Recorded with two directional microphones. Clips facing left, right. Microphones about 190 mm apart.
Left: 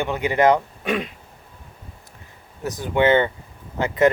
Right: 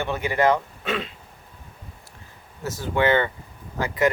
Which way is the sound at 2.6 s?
15° left (ahead or behind).